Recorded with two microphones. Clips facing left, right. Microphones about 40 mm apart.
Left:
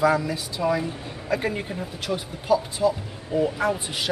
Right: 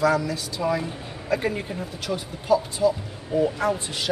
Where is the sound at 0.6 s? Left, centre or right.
Centre.